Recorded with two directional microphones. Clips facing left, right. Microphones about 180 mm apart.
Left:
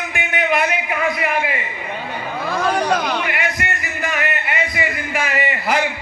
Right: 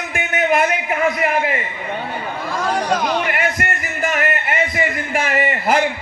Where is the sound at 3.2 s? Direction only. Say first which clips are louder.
Right 2 dB; 45° right (ahead or behind).